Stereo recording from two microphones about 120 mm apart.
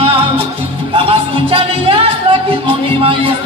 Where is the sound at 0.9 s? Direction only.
50° right (ahead or behind).